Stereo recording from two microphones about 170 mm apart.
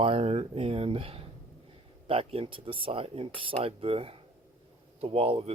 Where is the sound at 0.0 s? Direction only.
35° right (ahead or behind).